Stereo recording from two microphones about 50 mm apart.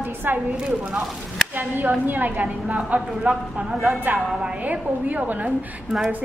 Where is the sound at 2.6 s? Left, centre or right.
Centre.